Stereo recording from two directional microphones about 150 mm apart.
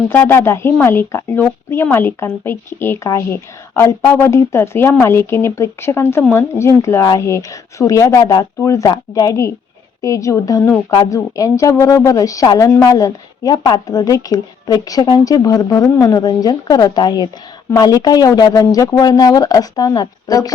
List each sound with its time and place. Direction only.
0.1 s a woman's voice: 15° left (ahead or behind)